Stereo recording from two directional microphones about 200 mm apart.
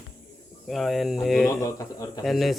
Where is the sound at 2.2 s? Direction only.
Centre (ahead or behind).